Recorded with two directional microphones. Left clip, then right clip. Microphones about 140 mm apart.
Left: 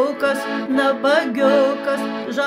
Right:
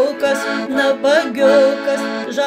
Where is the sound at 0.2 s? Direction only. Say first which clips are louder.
Right 3 dB; 15° left (ahead or behind).